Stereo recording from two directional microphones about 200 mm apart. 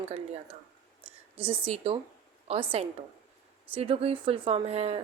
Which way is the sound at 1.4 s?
30° right (ahead or behind).